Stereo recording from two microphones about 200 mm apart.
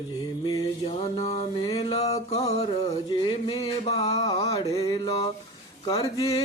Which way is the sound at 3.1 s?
25° left (ahead or behind).